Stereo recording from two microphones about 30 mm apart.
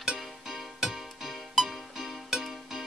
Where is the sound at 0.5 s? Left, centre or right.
Centre.